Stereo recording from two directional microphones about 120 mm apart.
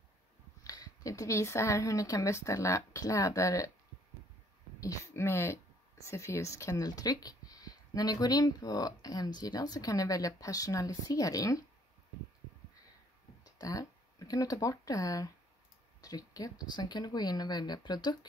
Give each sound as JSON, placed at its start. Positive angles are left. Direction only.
{"t": 0.7, "sound": "a woman's voice", "side_deg": 30}
{"t": 4.7, "sound": "a woman's voice", "side_deg": 25}
{"t": 13.4, "sound": "speech", "side_deg": 30}